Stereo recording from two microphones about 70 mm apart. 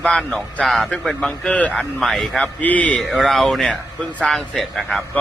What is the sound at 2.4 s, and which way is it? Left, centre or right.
Speech, left.